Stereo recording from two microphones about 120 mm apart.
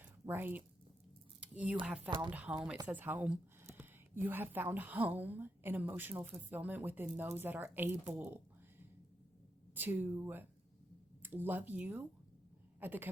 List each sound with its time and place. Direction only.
0.3 s a woman's voice: 15° right (ahead or behind)
1.4 s a sound: 10° right (ahead or behind)
1.8 s a woman's voice: 10° right (ahead or behind)
2.0 s speech: 40° right (ahead or behind)
2.3 s a woman's voice: 10° right (ahead or behind)
9.7 s a woman's voice: 15° right (ahead or behind)